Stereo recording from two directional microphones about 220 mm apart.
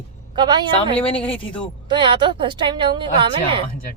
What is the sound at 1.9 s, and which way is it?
A woman's voice, 20° right (ahead or behind).